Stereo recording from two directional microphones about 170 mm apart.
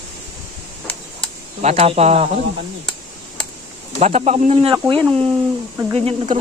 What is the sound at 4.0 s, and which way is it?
Speech, 40° right (ahead or behind).